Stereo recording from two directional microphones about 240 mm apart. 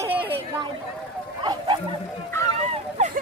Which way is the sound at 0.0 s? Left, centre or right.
Centre.